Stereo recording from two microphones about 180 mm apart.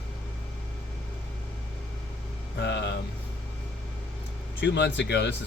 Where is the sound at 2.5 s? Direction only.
70° left (ahead or behind).